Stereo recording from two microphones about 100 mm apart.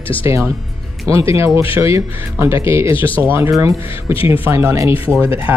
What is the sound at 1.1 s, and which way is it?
Speech, 30° right (ahead or behind).